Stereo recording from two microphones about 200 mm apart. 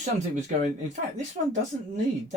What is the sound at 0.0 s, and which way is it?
Speech, 35° right (ahead or behind).